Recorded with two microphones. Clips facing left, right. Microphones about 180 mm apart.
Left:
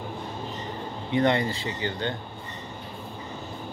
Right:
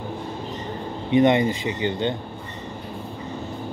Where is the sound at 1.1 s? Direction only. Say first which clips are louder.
Right 6 dB; 20° right (ahead or behind).